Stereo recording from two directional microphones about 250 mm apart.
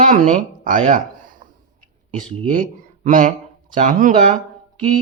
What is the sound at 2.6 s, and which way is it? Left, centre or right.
Speech, right.